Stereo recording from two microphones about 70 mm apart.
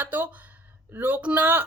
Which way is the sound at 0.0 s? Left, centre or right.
Right.